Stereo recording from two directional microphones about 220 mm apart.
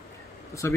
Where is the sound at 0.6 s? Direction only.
10° left (ahead or behind).